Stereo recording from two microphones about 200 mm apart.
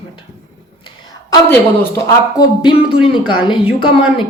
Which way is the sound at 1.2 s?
15° left (ahead or behind).